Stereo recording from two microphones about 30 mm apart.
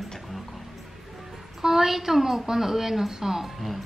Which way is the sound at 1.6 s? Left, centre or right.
Centre.